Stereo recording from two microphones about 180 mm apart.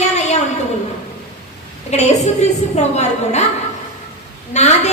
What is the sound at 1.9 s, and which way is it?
A woman's voice, 40° left (ahead or behind).